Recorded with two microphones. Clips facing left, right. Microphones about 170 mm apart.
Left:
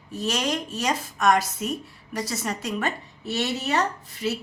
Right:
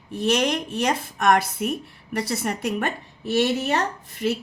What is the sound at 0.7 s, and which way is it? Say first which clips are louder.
A woman's voice: right 3 dB; 60° right (ahead or behind).